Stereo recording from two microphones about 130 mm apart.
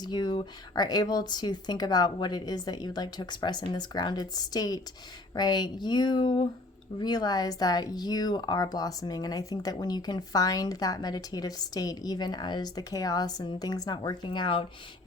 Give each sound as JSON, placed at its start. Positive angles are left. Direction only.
{"t": 0.0, "sound": "speech", "side_deg": 35}